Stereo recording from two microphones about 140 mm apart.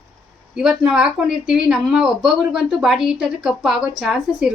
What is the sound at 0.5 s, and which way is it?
A woman's voice, 5° right (ahead or behind).